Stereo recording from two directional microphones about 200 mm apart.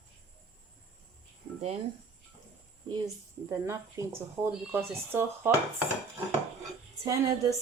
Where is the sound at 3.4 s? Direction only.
15° right (ahead or behind).